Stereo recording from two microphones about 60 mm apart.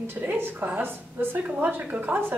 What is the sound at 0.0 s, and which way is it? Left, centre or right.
A woman's voice, right.